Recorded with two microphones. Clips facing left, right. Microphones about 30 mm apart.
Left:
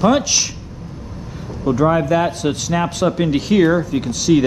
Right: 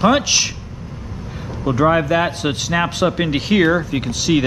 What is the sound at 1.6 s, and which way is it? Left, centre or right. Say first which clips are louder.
A man's voice: even; right.